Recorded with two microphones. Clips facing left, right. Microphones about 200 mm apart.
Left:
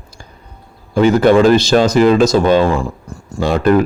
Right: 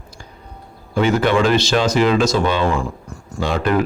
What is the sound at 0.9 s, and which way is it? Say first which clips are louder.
Speech: left 6 dB; 40° left (ahead or behind).